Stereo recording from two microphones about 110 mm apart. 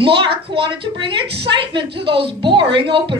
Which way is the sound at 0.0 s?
50° right (ahead or behind).